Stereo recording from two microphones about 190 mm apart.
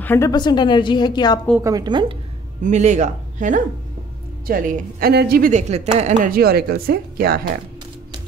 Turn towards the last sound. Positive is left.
turn(degrees=-55)  # may be behind; listen again after turning